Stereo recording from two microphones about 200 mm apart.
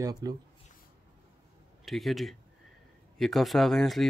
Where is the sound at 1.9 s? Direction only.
Centre (ahead or behind).